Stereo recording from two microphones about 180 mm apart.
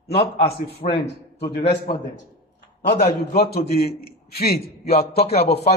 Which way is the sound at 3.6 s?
35° left (ahead or behind).